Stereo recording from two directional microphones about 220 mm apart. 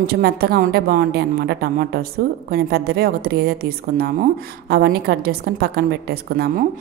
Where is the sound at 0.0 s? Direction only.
45° right (ahead or behind).